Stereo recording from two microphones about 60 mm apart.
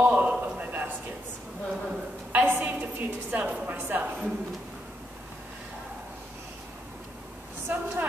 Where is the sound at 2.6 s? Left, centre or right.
Right.